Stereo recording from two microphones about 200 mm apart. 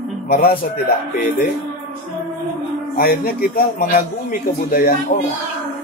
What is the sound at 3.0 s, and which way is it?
A man's voice, 45° left (ahead or behind).